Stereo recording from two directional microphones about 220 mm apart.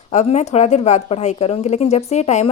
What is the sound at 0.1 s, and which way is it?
Speech, 30° left (ahead or behind).